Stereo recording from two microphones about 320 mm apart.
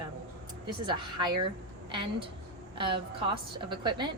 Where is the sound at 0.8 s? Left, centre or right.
Centre.